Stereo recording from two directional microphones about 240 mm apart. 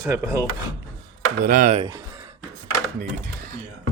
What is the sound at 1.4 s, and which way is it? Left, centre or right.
Speech, right.